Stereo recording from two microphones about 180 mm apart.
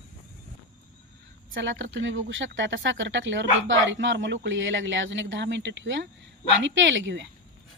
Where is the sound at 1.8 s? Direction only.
90° right.